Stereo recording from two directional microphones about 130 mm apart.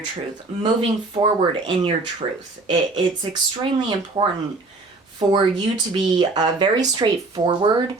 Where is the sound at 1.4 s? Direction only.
40° right (ahead or behind).